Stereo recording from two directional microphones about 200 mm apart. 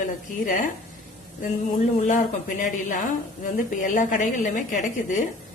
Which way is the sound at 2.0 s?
40° left (ahead or behind).